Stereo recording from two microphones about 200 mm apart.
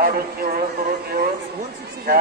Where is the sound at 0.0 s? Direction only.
45° right (ahead or behind).